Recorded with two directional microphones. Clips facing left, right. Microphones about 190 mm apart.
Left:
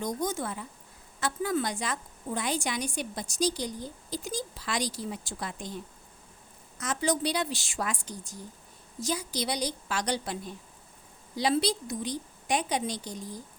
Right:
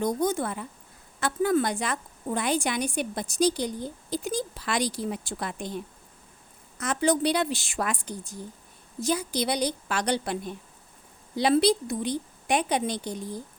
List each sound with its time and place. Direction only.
0.0 s a woman's voice: 60° right (ahead or behind)